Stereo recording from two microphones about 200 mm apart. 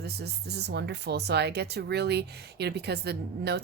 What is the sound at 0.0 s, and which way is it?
Speech, 55° right (ahead or behind).